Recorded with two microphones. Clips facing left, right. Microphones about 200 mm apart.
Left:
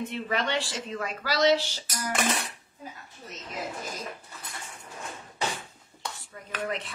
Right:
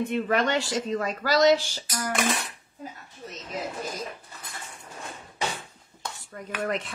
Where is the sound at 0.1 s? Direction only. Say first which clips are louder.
Right 5 dB; 50° right (ahead or behind).